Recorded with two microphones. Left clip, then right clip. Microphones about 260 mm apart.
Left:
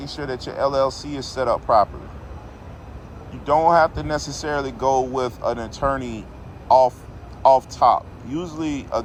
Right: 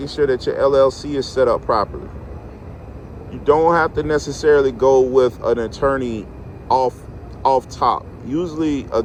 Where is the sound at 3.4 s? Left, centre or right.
Left.